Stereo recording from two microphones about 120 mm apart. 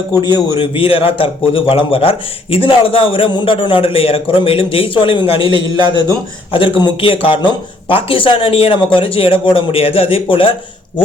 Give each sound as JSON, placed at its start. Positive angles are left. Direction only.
{"t": 0.3, "sound": "a man's voice", "side_deg": 45}
{"t": 6.5, "sound": "a man's voice", "side_deg": 45}